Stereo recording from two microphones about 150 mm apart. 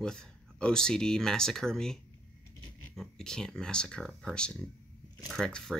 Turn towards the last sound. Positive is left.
turn(degrees=5)  # may be behind; listen again after turning